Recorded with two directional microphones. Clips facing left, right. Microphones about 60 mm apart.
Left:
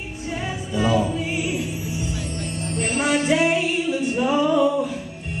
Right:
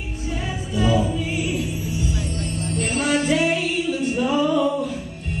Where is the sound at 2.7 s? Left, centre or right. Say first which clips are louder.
Even; left.